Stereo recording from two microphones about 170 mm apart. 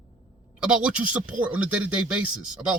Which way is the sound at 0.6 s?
5° right (ahead or behind).